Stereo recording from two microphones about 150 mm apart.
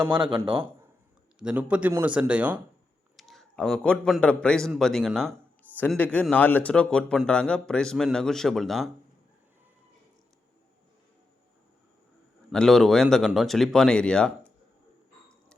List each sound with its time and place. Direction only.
0.1 s a man's voice: 30° right (ahead or behind)
1.4 s a man's voice: 10° right (ahead or behind)
12.5 s speech: 5° left (ahead or behind)